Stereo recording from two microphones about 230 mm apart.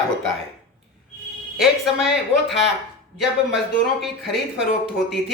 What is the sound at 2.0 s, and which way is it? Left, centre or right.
Speech, left.